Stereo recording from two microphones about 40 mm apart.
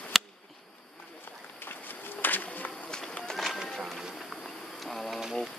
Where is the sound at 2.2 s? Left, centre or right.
Left.